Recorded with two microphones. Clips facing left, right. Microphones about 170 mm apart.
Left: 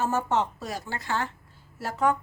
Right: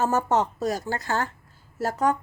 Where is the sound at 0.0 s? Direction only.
40° right (ahead or behind).